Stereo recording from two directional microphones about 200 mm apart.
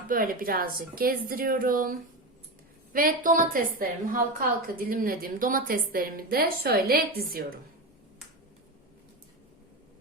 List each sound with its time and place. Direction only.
0.1 s a woman's voice: 45° right (ahead or behind)